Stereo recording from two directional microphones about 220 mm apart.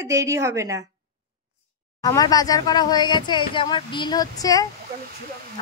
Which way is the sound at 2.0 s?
15° left (ahead or behind).